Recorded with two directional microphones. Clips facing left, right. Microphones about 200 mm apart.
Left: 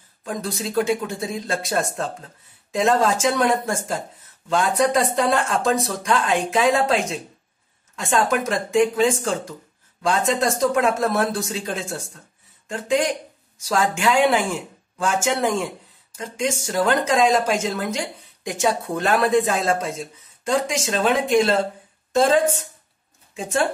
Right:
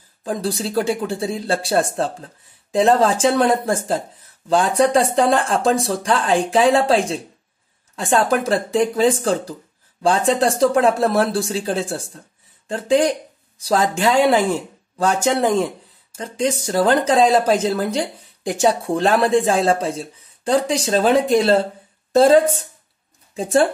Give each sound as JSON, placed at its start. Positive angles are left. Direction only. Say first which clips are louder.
{"t": 0.2, "sound": "speech", "louder": "right 5 dB", "side_deg": -30}